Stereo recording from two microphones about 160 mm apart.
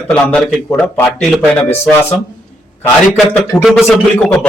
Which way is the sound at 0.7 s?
15° left (ahead or behind).